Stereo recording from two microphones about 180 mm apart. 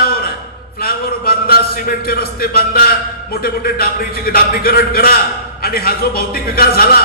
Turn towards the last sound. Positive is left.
turn(degrees=55)  # may be behind; listen again after turning